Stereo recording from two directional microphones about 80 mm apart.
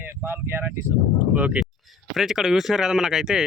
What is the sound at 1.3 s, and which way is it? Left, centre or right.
Speech, centre.